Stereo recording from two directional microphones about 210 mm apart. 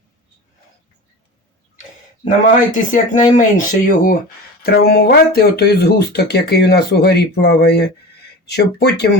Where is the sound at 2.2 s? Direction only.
40° left (ahead or behind).